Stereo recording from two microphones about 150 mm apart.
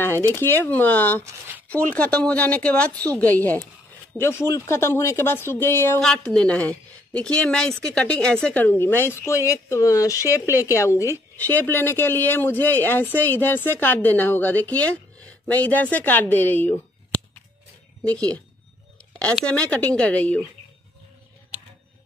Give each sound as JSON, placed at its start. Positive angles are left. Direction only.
{"t": 0.3, "sound": "a woman's voice", "side_deg": 15}
{"t": 5.9, "sound": "a woman's voice", "side_deg": 5}
{"t": 18.0, "sound": "a woman's voice", "side_deg": 10}